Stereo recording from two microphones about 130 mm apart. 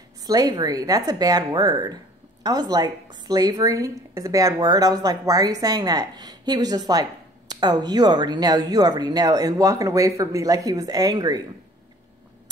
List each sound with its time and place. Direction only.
0.2 s a woman's voice: 30° right (ahead or behind)